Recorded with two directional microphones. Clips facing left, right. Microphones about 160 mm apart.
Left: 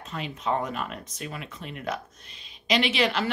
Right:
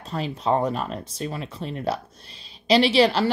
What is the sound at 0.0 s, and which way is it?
Speech, 35° right (ahead or behind).